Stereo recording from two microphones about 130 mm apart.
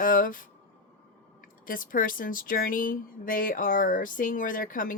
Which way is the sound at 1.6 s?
90° left.